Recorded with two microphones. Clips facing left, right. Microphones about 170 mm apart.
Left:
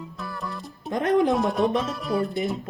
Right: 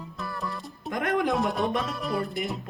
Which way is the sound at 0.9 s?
20° left (ahead or behind).